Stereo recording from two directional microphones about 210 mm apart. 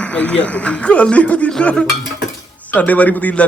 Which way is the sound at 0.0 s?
5° left (ahead or behind).